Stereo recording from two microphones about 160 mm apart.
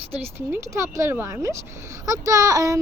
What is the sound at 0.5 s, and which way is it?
Speech, 20° right (ahead or behind).